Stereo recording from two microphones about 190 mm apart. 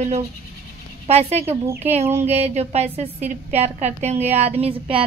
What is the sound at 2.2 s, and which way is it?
A woman's voice, 35° right (ahead or behind).